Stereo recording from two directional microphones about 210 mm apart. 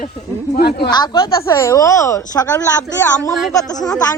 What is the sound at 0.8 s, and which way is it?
A woman's voice, 20° left (ahead or behind).